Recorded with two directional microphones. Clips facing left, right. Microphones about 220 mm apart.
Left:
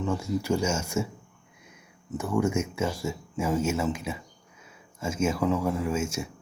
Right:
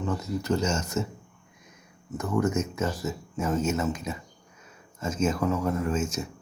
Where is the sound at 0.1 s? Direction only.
10° left (ahead or behind).